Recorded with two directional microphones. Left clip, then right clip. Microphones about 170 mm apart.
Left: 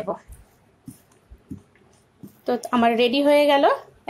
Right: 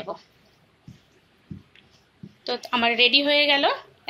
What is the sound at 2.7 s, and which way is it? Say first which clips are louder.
Speech: right 1 dB; 40° left (ahead or behind).